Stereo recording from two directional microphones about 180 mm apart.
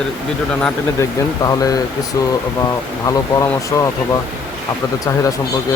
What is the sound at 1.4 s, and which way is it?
Speech, 20° left (ahead or behind).